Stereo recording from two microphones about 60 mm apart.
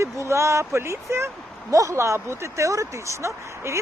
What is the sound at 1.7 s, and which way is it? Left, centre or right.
Speech, right.